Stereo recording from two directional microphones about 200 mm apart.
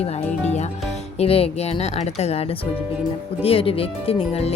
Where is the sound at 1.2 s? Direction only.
30° left (ahead or behind).